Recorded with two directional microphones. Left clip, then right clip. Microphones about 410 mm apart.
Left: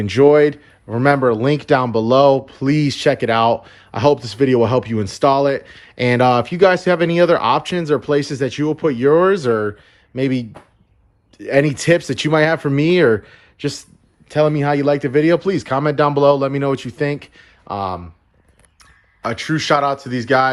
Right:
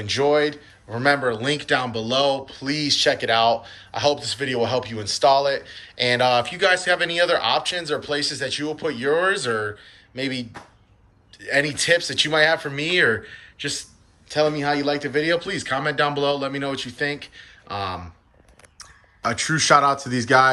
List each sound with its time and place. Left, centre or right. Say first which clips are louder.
0.0 s speech: left 8 dB; centre
11.5 s a man's voice: left 5 dB; centre